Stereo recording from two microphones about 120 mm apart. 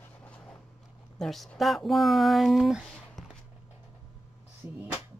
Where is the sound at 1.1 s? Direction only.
5° left (ahead or behind).